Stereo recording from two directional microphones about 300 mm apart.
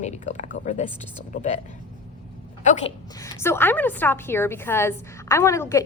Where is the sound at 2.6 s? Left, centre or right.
Left.